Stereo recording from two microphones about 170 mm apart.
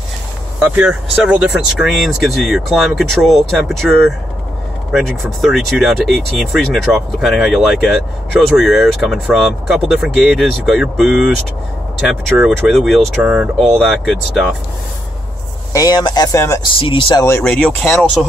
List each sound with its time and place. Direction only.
0.6 s speech: 10° right (ahead or behind)
12.4 s speech: centre (ahead or behind)
15.7 s speech: 20° left (ahead or behind)
16.8 s speech: 30° left (ahead or behind)
17.4 s speech: 5° left (ahead or behind)